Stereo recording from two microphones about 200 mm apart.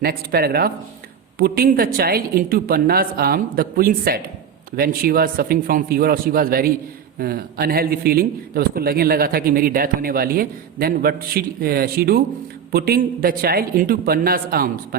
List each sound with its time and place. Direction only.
0.0 s a man's voice: 50° right (ahead or behind)